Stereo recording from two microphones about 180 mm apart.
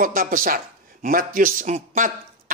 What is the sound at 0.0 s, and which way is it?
Speech, 50° right (ahead or behind).